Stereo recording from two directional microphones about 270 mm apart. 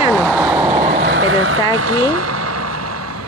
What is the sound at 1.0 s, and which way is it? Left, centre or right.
Speech, right.